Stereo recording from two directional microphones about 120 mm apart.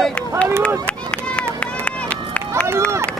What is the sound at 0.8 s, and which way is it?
Run, 10° left (ahead or behind).